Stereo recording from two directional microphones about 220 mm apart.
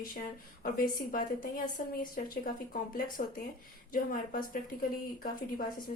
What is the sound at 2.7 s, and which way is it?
A woman's voice, 40° left (ahead or behind).